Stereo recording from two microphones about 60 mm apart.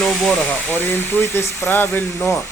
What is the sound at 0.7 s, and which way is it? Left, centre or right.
Speech, left.